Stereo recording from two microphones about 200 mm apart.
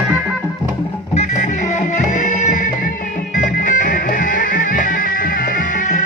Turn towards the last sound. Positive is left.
turn(degrees=40)  # may be behind; listen again after turning